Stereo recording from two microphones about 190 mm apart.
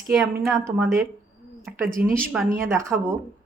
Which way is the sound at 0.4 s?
15° right (ahead or behind).